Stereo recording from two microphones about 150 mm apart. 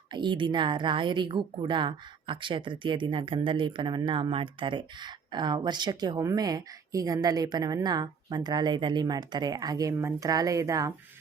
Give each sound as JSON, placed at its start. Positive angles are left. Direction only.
{"t": 0.1, "sound": "a woman's voice", "side_deg": -30}